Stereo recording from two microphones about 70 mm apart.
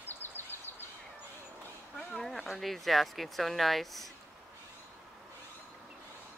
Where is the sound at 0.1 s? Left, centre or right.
Left.